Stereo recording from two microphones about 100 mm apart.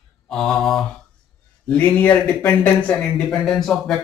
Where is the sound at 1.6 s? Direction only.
20° left (ahead or behind); by 3.9 s centre (ahead or behind).